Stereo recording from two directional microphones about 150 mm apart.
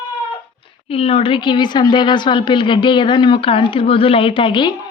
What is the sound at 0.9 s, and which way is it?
A woman's voice, 40° left (ahead or behind).